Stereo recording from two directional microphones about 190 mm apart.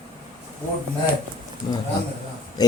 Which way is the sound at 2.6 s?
20° left (ahead or behind).